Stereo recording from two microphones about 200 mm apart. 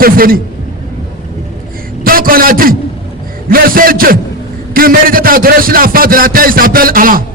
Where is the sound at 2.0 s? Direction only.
45° right (ahead or behind).